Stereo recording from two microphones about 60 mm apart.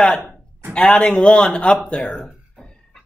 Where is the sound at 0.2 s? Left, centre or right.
Right.